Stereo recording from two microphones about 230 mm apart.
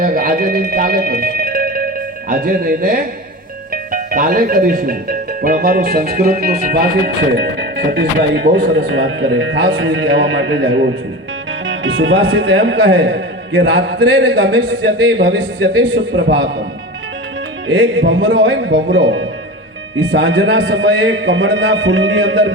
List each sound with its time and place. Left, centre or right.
0.0 s speech: right
4.1 s speech: right
17.7 s speech: right